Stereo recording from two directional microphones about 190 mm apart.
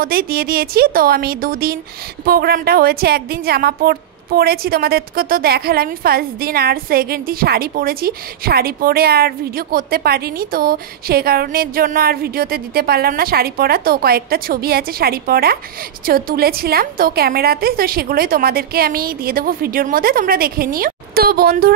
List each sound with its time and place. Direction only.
0.0 s a woman's voice: 50° right (ahead or behind)